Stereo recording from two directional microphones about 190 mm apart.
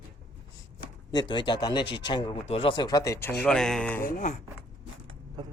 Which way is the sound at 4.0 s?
45° left (ahead or behind).